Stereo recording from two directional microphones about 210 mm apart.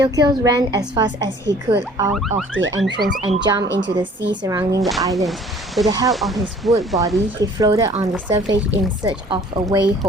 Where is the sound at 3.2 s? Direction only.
30° right (ahead or behind).